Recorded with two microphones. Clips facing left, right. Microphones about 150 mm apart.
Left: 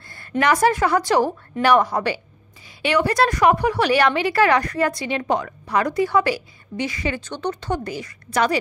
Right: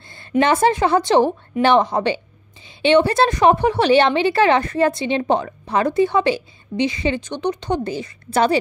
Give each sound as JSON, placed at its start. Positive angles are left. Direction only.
{"t": 0.4, "sound": "a woman's voice", "side_deg": -25}